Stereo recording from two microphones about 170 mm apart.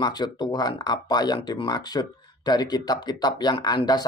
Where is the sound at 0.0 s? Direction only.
25° left (ahead or behind).